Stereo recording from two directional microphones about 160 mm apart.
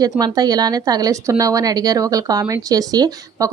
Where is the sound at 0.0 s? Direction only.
25° right (ahead or behind).